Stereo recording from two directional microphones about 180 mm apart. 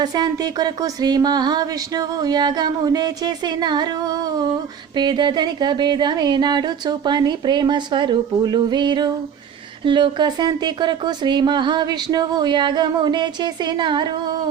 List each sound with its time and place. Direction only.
0.0 s speech: 20° right (ahead or behind)